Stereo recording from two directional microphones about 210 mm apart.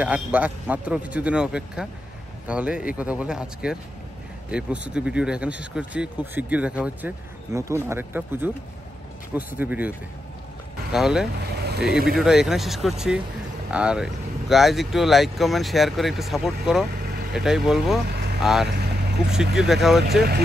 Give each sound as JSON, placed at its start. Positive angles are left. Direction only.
{"t": 0.0, "sound": "a man's voice", "side_deg": -5}
{"t": 11.5, "sound": "vehicle", "side_deg": -50}
{"t": 12.2, "sound": "speech", "side_deg": 0}
{"t": 18.0, "sound": "vehicle", "side_deg": -50}
{"t": 18.4, "sound": "speech", "side_deg": 0}
{"t": 20.1, "sound": "speech", "side_deg": -50}